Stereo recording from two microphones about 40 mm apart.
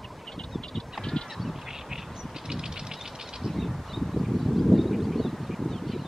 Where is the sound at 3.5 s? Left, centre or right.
Centre.